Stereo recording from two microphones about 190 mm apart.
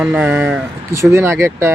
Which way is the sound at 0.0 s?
5° right (ahead or behind).